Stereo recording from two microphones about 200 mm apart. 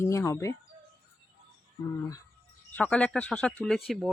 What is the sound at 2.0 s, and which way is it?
Speech, 15° left (ahead or behind).